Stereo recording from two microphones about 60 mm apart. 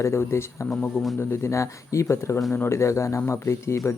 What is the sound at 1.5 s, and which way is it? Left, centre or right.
A man's voice, left.